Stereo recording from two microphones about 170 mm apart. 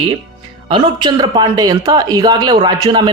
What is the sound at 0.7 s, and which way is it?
Speech, 25° right (ahead or behind).